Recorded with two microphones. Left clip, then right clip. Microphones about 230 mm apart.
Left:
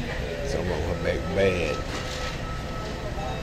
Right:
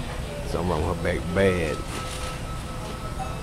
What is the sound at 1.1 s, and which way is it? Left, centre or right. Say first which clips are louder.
Speech: right 1 dB; right.